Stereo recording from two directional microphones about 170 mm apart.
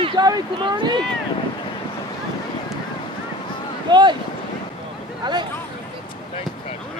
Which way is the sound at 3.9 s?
25° right (ahead or behind).